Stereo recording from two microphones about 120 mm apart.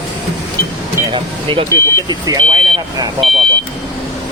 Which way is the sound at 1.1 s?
45° right (ahead or behind).